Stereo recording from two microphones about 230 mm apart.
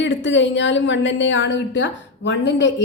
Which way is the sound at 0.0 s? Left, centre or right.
Left.